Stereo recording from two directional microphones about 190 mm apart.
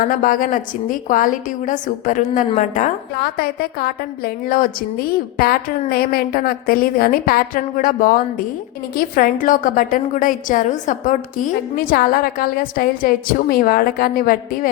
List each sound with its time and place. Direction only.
0.1 s a woman's voice: 45° left (ahead or behind)
3.3 s a woman's voice: 50° left (ahead or behind)